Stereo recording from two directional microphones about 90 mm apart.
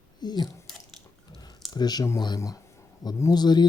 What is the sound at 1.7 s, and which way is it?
Speech, 50° left (ahead or behind).